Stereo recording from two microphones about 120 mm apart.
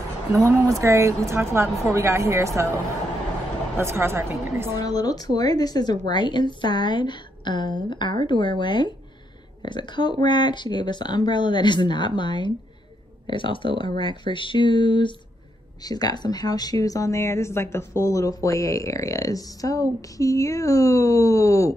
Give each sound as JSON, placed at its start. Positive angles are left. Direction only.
{"t": 0.3, "sound": "a woman's voice", "side_deg": -25}
{"t": 3.7, "sound": "a woman's voice", "side_deg": -20}
{"t": 4.7, "sound": "a woman's voice", "side_deg": 30}